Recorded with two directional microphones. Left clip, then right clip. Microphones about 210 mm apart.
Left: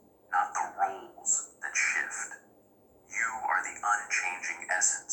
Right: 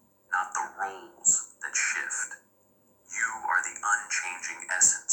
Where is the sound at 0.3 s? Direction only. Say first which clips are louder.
Left 1 dB; 45° right (ahead or behind).